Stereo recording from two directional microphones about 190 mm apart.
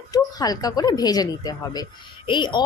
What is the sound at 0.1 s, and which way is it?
Speech, 20° left (ahead or behind).